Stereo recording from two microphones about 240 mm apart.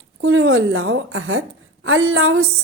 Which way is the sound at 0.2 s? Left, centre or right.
Right.